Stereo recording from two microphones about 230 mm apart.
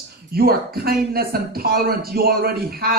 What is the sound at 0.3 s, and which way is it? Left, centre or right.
A man's voice, right.